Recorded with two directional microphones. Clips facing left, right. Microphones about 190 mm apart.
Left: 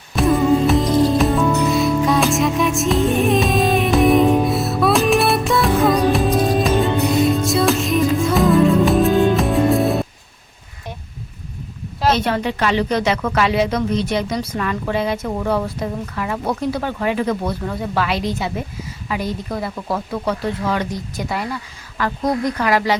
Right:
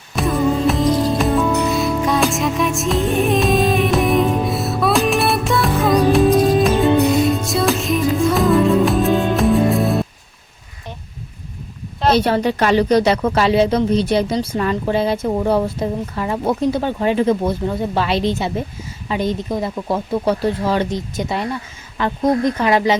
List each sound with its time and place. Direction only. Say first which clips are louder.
0.2 s music: left 2 dB; centre (ahead or behind)
12.2 s speech: right 3 dB; 35° right (ahead or behind); by 20.0 s 20° right (ahead or behind)
20.2 s speech: right 4 dB; 30° right (ahead or behind)